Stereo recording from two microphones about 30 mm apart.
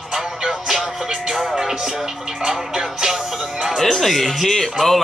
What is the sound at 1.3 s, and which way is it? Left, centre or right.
Music, centre.